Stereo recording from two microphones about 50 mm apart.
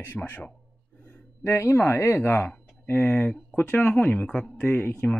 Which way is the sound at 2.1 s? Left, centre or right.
Left.